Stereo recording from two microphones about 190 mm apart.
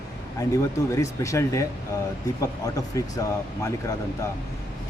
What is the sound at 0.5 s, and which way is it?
Speech, 15° left (ahead or behind).